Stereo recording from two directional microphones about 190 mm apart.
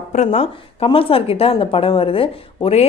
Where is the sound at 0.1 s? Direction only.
35° left (ahead or behind).